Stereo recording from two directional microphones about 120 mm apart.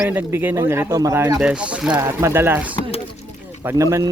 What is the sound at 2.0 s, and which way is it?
Speech, 20° right (ahead or behind).